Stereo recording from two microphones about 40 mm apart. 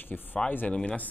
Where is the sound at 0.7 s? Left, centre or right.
Left.